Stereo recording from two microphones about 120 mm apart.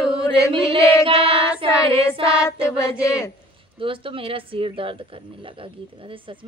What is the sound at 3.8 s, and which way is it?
Female singing, 45° right (ahead or behind).